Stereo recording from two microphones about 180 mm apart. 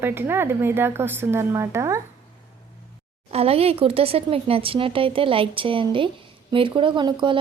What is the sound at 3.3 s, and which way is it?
Speech, 35° right (ahead or behind).